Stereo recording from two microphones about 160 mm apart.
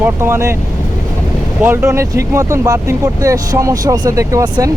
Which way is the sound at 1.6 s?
15° right (ahead or behind).